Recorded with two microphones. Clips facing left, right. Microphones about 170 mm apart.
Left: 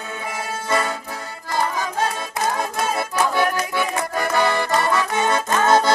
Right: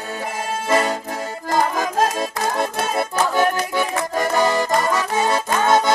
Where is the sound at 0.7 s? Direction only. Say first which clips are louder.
Right 4 dB; 40° right (ahead or behind).